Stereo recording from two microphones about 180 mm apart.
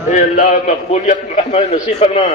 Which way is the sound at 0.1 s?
45° left (ahead or behind).